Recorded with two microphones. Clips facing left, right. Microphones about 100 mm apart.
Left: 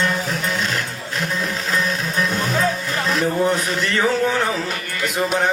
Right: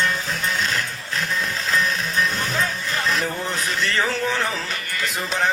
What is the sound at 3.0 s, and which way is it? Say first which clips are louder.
Speech: left 8 dB; 35° left (ahead or behind).